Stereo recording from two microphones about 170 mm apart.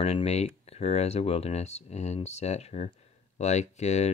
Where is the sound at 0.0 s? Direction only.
40° left (ahead or behind).